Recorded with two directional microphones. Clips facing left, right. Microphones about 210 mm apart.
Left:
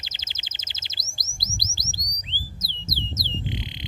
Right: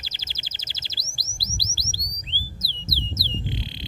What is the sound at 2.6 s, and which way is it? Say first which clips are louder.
Squawk: even; 20° left (ahead or behind).